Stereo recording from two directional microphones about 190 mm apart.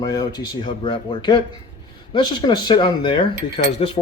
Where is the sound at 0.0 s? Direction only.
20° left (ahead or behind).